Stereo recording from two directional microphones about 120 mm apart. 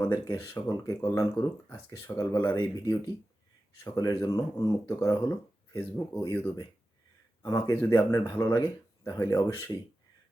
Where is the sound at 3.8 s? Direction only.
30° left (ahead or behind).